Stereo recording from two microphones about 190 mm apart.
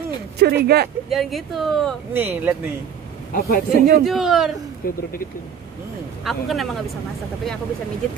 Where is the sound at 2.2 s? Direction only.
10° right (ahead or behind).